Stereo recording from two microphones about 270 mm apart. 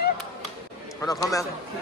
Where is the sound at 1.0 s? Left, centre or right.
Centre.